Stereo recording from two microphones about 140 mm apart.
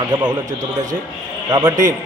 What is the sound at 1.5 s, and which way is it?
Speech, 25° right (ahead or behind).